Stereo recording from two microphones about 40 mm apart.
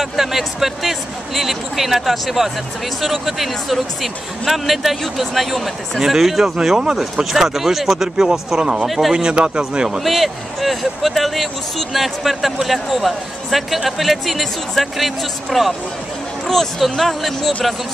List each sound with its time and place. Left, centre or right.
0.0 s a man's voice: centre
7.3 s speech: centre
8.8 s a man's voice: centre
9.1 s speech: right
9.9 s a man's voice: centre
16.9 s speech: centre